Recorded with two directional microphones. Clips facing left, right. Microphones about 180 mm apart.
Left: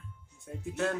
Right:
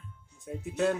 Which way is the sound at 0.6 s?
15° right (ahead or behind).